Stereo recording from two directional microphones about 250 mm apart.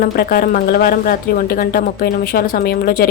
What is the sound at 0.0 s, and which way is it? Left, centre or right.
Speech, left.